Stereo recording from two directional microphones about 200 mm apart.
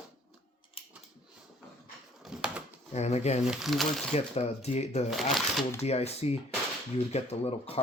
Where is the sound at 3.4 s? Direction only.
Centre (ahead or behind).